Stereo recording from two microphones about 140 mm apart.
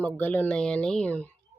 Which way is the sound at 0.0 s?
15° left (ahead or behind).